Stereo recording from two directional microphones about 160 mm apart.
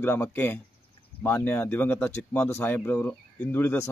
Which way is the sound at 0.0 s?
15° left (ahead or behind).